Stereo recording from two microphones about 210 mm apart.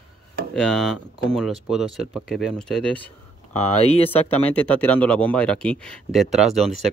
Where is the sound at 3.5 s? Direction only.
30° left (ahead or behind).